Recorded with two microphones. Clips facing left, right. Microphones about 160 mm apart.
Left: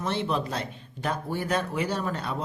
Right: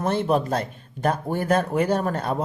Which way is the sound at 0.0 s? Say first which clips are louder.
Right 6 dB; 50° right (ahead or behind).